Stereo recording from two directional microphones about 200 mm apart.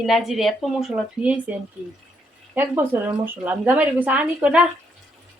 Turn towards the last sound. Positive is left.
turn(degrees=-5)  # may be behind; listen again after turning